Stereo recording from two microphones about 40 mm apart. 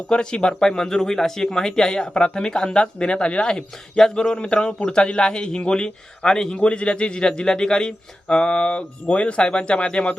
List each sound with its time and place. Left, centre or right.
0.1 s speech: left
6.6 s speech: left